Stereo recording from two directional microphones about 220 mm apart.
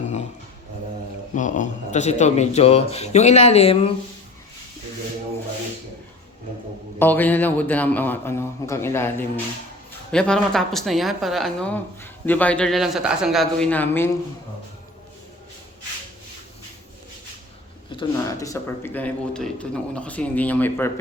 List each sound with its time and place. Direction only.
1.4 s a man's voice: 35° left (ahead or behind)
7.0 s speech: 10° left (ahead or behind)
17.9 s speech: 15° left (ahead or behind)